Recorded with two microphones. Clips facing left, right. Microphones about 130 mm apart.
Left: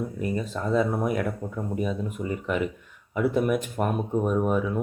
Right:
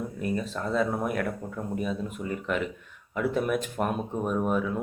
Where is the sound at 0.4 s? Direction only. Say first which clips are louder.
Left 5 dB; 15° left (ahead or behind).